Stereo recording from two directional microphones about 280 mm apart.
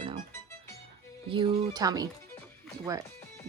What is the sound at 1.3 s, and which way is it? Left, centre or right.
Speech, centre.